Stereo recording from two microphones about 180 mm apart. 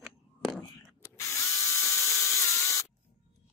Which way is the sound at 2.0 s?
15° left (ahead or behind).